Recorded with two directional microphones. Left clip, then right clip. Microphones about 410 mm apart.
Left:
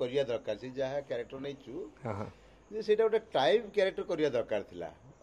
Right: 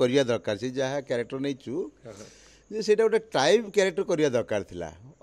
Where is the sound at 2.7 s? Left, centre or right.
Right.